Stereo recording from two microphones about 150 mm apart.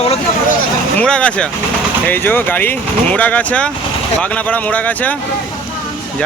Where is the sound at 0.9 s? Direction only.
5° left (ahead or behind).